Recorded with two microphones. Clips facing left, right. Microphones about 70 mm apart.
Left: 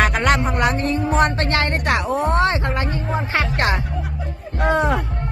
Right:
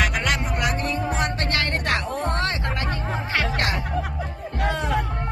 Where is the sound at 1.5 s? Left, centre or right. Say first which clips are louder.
Left 4 dB; left.